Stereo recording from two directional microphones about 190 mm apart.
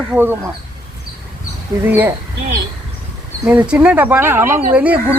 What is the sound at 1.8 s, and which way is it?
Speech, 10° right (ahead or behind).